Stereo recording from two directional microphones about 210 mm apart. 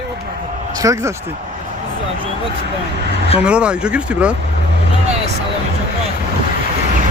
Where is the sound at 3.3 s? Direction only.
5° right (ahead or behind).